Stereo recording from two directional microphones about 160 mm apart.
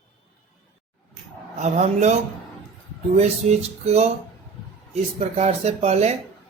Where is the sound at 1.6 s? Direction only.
45° right (ahead or behind).